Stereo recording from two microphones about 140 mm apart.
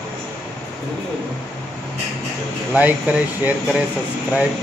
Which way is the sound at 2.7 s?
10° right (ahead or behind).